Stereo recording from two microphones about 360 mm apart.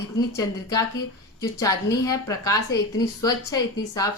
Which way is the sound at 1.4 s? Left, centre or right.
Centre.